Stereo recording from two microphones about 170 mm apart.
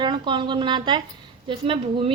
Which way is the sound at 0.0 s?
25° right (ahead or behind).